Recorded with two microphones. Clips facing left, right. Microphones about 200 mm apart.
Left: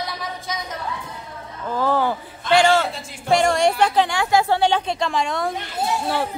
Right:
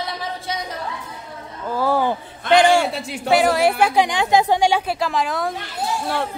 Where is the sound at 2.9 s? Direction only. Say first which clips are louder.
Right 8 dB; 70° right (ahead or behind).